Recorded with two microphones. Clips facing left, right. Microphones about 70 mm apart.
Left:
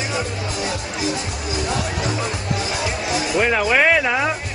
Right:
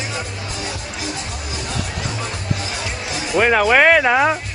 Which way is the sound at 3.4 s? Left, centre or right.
Right.